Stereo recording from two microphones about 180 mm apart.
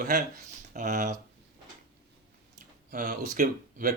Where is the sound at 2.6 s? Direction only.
50° right (ahead or behind).